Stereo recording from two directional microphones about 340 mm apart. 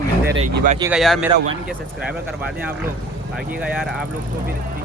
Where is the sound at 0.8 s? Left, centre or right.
Centre.